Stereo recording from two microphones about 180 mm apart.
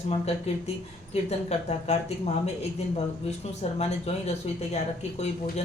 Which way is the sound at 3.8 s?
35° left (ahead or behind).